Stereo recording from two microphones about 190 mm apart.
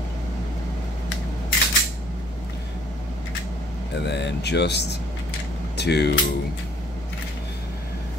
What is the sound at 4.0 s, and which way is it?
Speech, 65° left (ahead or behind).